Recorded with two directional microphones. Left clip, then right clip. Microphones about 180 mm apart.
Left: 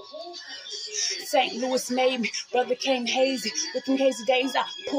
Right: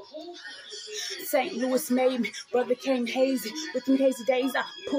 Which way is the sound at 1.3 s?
15° right (ahead or behind).